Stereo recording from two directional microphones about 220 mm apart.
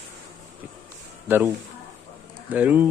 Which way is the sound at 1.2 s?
10° right (ahead or behind).